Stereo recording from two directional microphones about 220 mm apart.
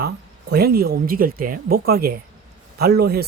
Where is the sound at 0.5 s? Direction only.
45° right (ahead or behind).